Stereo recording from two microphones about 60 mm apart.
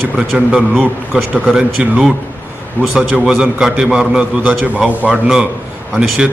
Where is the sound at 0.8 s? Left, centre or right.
Right.